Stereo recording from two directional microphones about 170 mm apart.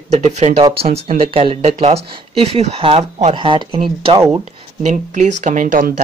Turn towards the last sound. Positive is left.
turn(degrees=-50)  # may be behind; listen again after turning